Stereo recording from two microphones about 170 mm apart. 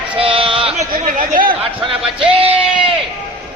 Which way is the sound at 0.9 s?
55° right (ahead or behind).